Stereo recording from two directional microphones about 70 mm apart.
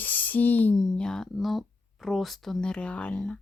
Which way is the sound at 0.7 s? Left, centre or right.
Centre.